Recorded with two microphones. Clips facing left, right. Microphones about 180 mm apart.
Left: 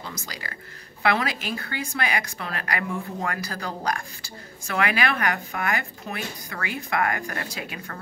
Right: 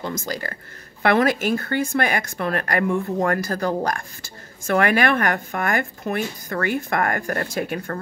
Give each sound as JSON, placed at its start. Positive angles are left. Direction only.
{"t": 0.0, "sound": "speech", "side_deg": -50}